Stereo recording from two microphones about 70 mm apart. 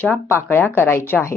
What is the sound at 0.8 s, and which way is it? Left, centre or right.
Speech, left.